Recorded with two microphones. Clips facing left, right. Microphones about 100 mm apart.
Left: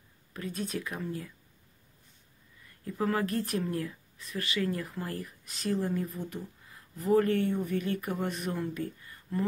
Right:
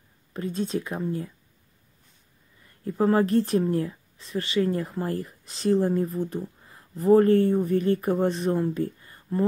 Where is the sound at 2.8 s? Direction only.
30° right (ahead or behind).